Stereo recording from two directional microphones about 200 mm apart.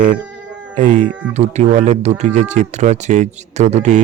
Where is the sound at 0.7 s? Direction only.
40° right (ahead or behind).